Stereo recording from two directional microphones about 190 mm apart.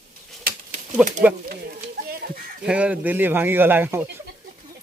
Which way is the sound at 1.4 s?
55° right (ahead or behind).